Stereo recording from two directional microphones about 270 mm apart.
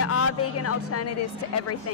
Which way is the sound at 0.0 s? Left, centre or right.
Left.